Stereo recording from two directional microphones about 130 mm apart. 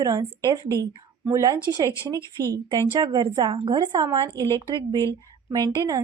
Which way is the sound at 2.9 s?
35° right (ahead or behind).